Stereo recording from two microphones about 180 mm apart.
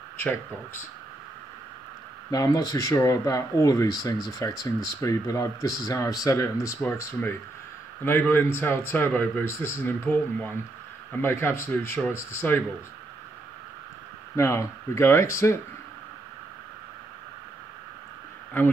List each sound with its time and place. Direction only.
2.3 s speech: 20° left (ahead or behind)
14.3 s speech: 15° left (ahead or behind)